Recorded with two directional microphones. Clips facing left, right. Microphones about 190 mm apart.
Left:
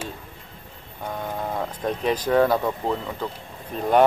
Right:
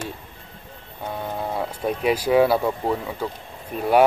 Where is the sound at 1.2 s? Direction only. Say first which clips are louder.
Right 1 dB; 10° right (ahead or behind).